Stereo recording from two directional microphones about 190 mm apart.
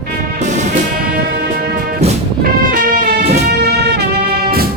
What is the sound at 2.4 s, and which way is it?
Music, 50° right (ahead or behind).